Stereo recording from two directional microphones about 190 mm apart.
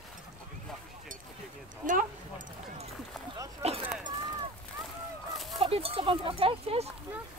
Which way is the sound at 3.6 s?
35° right (ahead or behind).